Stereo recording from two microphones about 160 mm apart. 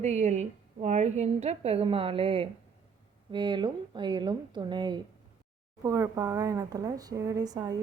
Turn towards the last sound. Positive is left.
turn(degrees=-25)  # may be behind; listen again after turning